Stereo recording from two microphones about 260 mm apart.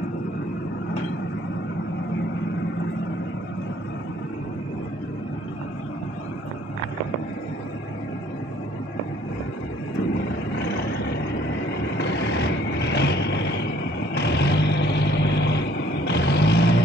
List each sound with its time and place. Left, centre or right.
12.0 s vehicle: left